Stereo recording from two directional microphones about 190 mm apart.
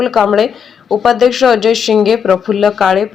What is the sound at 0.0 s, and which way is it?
Speech, centre (ahead or behind).